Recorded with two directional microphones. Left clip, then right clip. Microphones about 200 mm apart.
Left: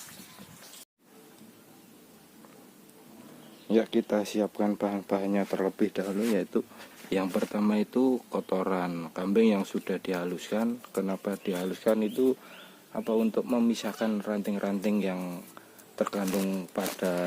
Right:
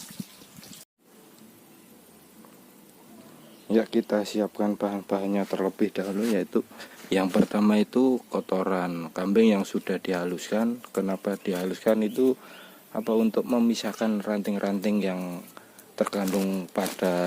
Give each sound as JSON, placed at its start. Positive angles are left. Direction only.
{"t": 3.7, "sound": "speech", "side_deg": -5}